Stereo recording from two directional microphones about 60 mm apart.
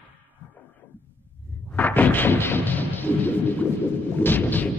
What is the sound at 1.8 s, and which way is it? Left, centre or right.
Artillery fire, left.